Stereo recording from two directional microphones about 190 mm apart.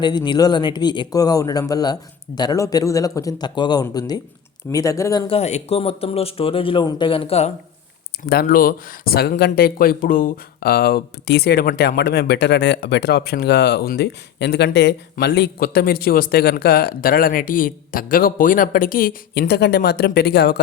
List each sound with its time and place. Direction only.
0.0 s speech: 25° left (ahead or behind)
5.3 s speech: 35° left (ahead or behind)
8.2 s speech: 50° left (ahead or behind)